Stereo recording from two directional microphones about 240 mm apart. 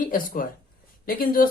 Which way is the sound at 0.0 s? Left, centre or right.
Left.